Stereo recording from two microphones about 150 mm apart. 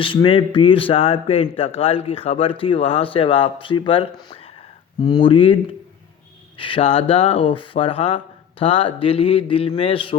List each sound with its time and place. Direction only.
0.0 s speech: 35° left (ahead or behind)
6.6 s speech: 35° left (ahead or behind)